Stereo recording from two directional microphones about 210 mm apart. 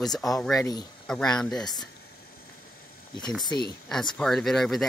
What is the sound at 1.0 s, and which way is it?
Speech, 5° left (ahead or behind).